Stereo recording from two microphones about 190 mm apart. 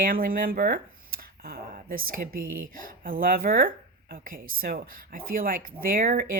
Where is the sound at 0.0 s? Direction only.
50° right (ahead or behind).